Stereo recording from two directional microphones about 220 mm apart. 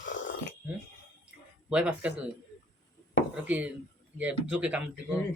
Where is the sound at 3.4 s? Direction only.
5° right (ahead or behind).